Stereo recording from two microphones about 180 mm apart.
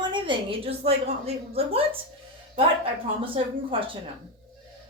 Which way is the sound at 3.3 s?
30° right (ahead or behind).